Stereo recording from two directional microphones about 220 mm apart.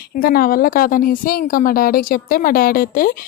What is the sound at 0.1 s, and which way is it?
A woman's voice, 40° left (ahead or behind).